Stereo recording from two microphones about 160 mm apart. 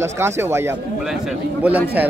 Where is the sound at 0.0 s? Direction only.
15° right (ahead or behind).